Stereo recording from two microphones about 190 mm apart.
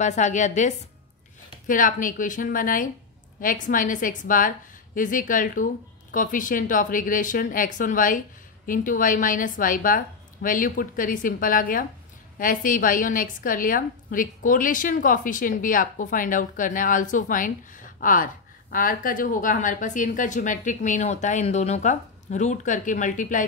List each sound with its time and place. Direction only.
0.0 s a woman's voice: 40° left (ahead or behind)